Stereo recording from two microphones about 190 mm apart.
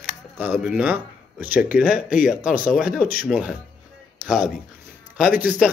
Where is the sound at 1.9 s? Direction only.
45° left (ahead or behind).